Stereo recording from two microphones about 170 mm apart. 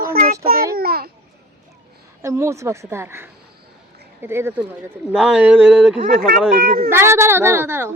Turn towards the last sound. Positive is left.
turn(degrees=-15)  # may be behind; listen again after turning